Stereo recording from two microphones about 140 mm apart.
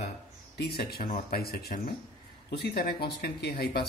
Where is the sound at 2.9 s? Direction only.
90° left.